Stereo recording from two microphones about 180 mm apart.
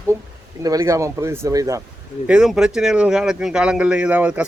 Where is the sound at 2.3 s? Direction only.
5° right (ahead or behind).